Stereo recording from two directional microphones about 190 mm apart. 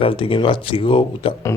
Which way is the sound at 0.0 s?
30° left (ahead or behind).